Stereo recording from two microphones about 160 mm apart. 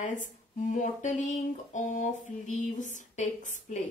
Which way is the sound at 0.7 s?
50° left (ahead or behind).